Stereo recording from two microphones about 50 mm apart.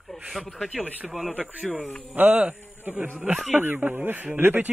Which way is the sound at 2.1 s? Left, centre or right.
Right.